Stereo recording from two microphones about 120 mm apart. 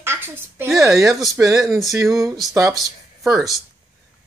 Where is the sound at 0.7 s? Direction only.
Centre (ahead or behind).